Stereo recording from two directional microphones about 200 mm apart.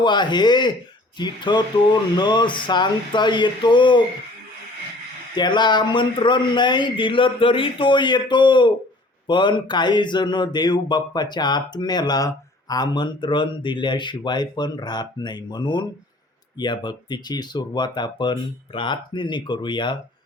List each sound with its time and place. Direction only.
0.0 s speech: 20° left (ahead or behind)
5.3 s speech: 20° left (ahead or behind)